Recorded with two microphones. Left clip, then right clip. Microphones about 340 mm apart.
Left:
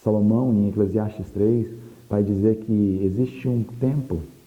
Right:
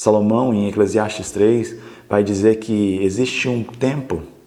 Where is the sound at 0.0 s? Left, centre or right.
Centre.